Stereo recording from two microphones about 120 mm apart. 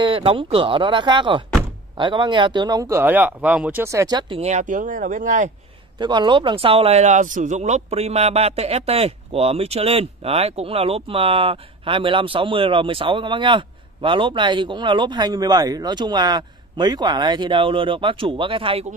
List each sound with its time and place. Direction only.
0.0 s speech: 50° right (ahead or behind); by 3.8 s 10° right (ahead or behind)
3.8 s speech: 25° right (ahead or behind)
4.4 s speech: 75° right (ahead or behind); by 5.5 s 90° right
5.9 s speech: 40° right (ahead or behind)